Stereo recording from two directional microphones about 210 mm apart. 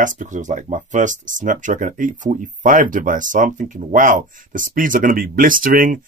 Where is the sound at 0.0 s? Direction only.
35° right (ahead or behind).